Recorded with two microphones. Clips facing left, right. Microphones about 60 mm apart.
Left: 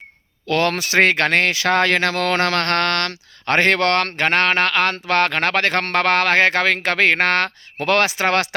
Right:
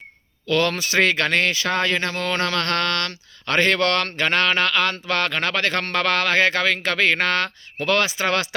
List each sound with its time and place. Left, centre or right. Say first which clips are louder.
0.4 s speech: left 2 dB; left